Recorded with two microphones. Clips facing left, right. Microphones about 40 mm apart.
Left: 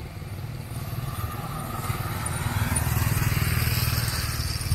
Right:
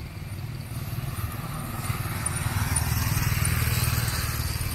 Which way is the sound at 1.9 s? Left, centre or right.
Centre.